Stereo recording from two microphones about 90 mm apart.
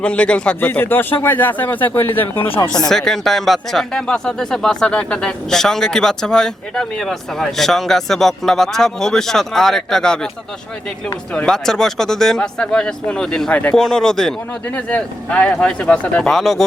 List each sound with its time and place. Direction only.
0.0 s speech: 10° left (ahead or behind)
2.3 s speech: 85° left
2.9 s speech: 5° left (ahead or behind)
11.3 s speech: 5° left (ahead or behind)
14.8 s speech: 15° left (ahead or behind)